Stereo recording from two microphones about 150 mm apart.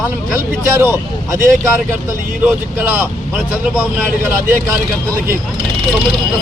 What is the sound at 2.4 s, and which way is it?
Speech, 10° right (ahead or behind).